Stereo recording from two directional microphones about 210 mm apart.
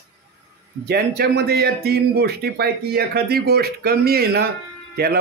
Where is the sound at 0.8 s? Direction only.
50° right (ahead or behind).